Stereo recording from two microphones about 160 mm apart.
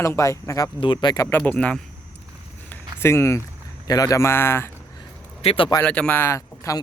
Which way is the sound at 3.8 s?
25° left (ahead or behind).